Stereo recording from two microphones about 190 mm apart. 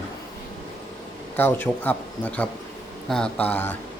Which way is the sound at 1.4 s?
10° left (ahead or behind).